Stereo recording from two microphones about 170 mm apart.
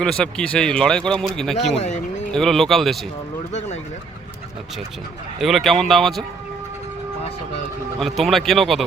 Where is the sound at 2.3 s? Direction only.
Centre (ahead or behind).